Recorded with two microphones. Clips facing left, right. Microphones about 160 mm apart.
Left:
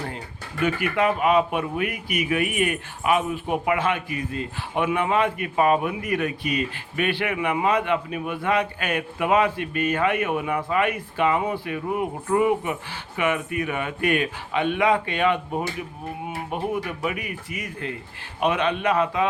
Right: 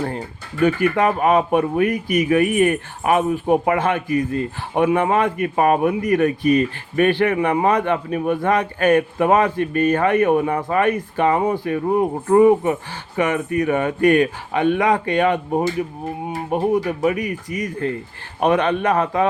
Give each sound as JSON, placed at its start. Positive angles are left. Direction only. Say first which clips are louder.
{"t": 0.9, "sound": "speech", "louder": "right 3 dB", "side_deg": -45}
{"t": 18.4, "sound": "speech", "louder": "right 5 dB", "side_deg": -50}